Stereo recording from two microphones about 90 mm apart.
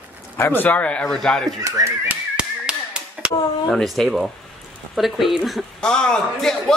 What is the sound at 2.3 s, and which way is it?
Tap, 10° right (ahead or behind).